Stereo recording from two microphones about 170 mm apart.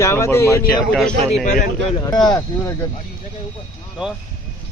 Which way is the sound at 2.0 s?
20° left (ahead or behind).